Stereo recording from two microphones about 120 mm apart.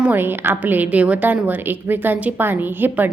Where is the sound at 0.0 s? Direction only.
15° right (ahead or behind).